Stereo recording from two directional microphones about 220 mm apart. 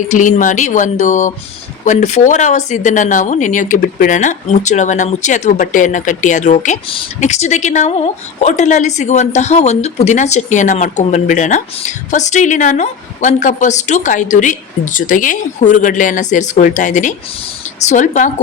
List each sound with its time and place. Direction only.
0.1 s a woman's voice: 35° left (ahead or behind)